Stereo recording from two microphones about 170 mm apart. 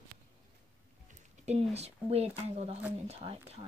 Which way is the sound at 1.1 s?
40° right (ahead or behind).